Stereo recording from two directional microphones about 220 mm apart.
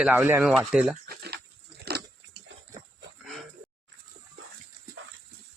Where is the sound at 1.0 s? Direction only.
45° right (ahead or behind).